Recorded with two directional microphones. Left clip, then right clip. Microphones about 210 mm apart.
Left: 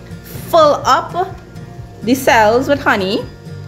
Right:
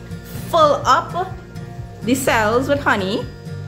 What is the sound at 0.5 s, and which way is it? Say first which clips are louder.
A woman's voice: left 4 dB; 15° left (ahead or behind).